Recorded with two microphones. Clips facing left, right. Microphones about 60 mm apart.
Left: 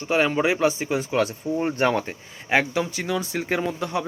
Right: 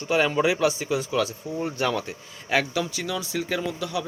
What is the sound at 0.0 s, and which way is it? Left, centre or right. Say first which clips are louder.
Speech: left 1 dB; left.